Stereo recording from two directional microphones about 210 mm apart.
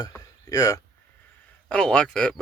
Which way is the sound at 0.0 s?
15° left (ahead or behind).